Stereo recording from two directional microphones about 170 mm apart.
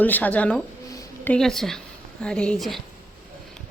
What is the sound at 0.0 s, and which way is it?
A woman's voice, 10° left (ahead or behind).